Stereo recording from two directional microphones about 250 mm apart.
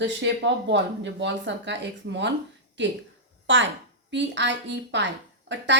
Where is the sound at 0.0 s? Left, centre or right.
Right.